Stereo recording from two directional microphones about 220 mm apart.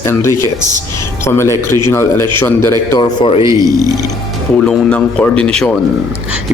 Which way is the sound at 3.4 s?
15° right (ahead or behind).